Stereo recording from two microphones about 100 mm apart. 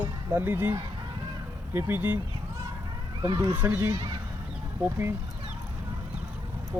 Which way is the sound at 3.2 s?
45° right (ahead or behind).